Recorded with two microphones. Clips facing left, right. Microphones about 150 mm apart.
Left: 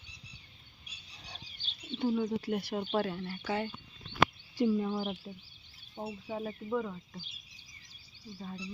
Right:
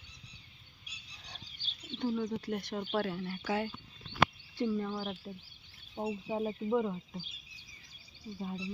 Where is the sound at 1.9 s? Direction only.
80° right.